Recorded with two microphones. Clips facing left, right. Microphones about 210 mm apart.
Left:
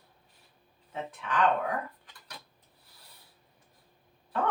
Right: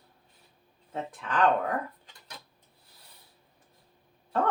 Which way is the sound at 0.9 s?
45° right (ahead or behind).